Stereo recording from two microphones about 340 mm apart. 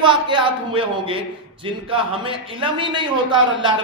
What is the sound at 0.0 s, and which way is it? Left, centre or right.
A man's voice, centre.